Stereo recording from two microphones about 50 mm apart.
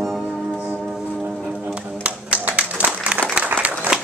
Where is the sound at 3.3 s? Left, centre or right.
Right.